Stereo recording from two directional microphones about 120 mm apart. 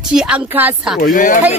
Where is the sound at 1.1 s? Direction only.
90° left.